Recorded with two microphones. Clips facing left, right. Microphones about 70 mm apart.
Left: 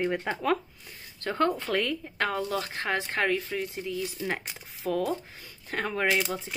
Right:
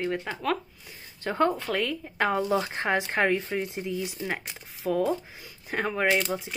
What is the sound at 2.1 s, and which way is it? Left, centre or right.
Speech, centre.